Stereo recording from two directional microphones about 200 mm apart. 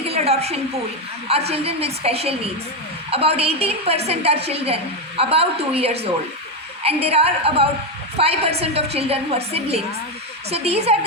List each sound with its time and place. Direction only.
0.0 s a woman's voice: 30° right (ahead or behind)